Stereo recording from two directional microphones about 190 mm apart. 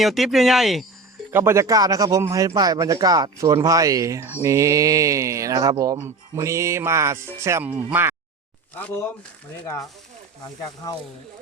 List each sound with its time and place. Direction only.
0.0 s speech: centre (ahead or behind)
1.3 s speech: 15° right (ahead or behind)
8.7 s speech: 10° left (ahead or behind)